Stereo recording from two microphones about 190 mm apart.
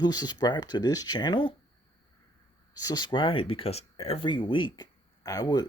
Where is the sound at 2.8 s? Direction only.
20° left (ahead or behind).